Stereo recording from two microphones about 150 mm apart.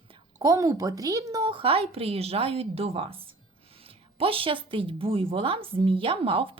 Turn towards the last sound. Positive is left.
turn(degrees=-35)  # may be behind; listen again after turning